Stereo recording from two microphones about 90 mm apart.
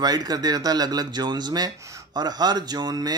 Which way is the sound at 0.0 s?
50° right (ahead or behind).